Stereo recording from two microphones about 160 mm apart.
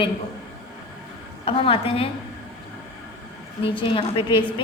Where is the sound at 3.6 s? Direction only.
30° left (ahead or behind).